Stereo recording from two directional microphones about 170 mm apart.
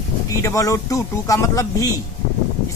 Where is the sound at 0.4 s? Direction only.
20° left (ahead or behind).